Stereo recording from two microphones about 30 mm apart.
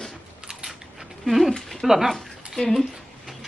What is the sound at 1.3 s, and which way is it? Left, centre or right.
Speech, centre.